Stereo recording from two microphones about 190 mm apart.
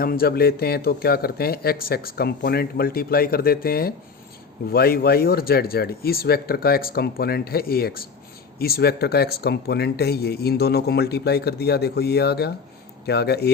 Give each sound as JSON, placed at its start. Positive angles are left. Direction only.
{"t": 0.0, "sound": "speech", "side_deg": 50}